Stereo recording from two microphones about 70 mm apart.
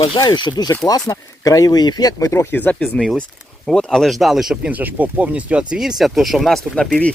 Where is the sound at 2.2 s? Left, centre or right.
Left.